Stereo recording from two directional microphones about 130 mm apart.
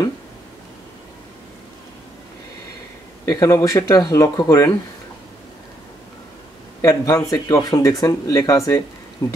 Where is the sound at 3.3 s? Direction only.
25° left (ahead or behind).